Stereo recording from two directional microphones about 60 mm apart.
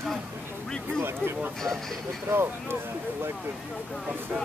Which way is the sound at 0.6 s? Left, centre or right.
Centre.